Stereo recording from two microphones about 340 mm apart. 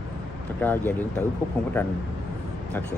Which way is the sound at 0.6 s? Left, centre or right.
Centre.